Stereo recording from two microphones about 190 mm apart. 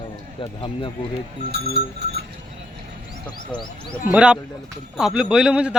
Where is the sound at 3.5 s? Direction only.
25° left (ahead or behind).